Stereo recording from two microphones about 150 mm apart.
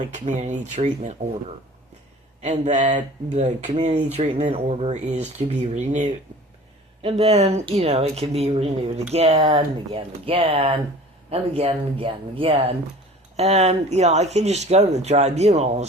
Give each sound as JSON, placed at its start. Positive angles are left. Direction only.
{"t": 0.0, "sound": "speech", "side_deg": -55}
{"t": 2.4, "sound": "speech", "side_deg": -50}